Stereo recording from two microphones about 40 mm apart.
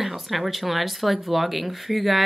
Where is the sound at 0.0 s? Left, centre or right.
Centre.